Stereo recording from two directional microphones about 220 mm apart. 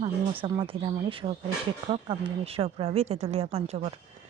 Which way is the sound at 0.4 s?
25° right (ahead or behind).